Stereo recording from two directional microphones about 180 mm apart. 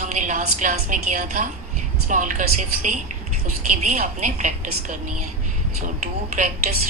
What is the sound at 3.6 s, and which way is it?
Speech, 45° right (ahead or behind).